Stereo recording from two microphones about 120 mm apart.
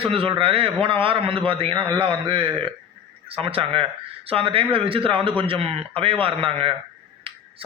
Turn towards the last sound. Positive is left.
turn(degrees=-50)  # may be behind; listen again after turning